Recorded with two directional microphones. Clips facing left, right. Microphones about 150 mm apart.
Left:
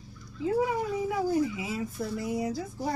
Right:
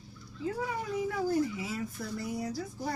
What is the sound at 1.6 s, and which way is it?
Speech, 15° left (ahead or behind).